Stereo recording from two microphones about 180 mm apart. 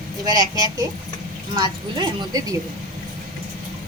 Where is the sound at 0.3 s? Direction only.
20° right (ahead or behind).